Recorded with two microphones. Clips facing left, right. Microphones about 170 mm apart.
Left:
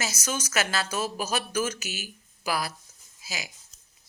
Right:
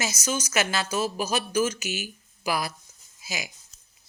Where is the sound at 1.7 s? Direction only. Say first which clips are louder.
Right 3 dB; 50° left (ahead or behind).